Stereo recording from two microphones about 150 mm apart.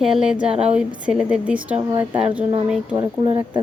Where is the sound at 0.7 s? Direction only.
5° right (ahead or behind).